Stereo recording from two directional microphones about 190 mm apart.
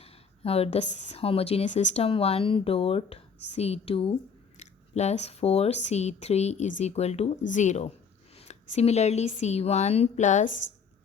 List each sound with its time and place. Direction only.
0.0 s a woman's voice: 30° left (ahead or behind)